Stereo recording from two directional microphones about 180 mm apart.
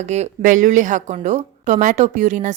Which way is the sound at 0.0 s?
40° right (ahead or behind).